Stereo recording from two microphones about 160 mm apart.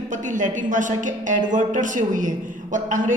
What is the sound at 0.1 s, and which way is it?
A woman's voice, 50° right (ahead or behind).